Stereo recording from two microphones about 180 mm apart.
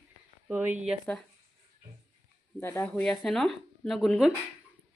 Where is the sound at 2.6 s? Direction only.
15° left (ahead or behind).